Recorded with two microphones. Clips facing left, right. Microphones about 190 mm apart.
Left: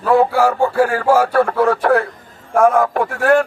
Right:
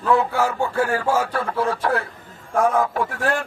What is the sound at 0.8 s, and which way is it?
A man's voice, 65° left (ahead or behind).